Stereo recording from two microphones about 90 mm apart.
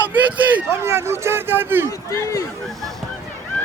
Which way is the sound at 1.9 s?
35° left (ahead or behind).